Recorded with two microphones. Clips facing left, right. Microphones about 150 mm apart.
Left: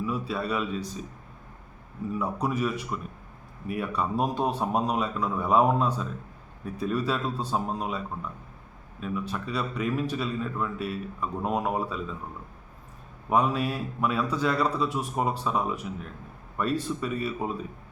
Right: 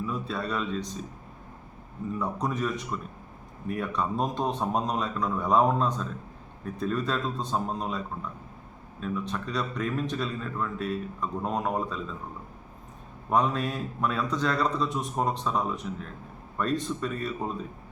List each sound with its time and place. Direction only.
0.0 s a man's voice: 5° left (ahead or behind)
2.1 s a man's voice: 5° left (ahead or behind)
13.3 s a man's voice: 5° left (ahead or behind)